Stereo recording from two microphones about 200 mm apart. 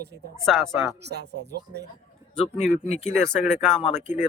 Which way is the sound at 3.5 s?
Centre (ahead or behind).